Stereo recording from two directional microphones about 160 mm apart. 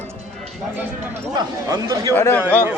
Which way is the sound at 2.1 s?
15° left (ahead or behind).